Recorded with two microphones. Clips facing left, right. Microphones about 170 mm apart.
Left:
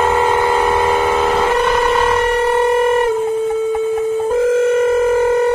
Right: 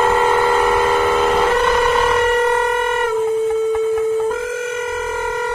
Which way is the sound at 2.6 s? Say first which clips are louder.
Left 5 dB; 30° left (ahead or behind).